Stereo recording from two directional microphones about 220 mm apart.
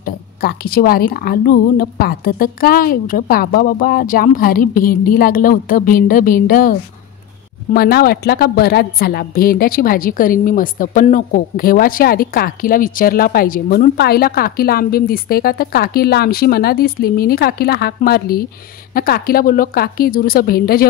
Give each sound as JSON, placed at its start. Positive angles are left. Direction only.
{"t": 0.0, "sound": "a woman's voice", "side_deg": 45}